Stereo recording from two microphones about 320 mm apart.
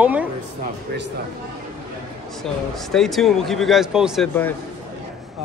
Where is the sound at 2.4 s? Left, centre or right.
Centre.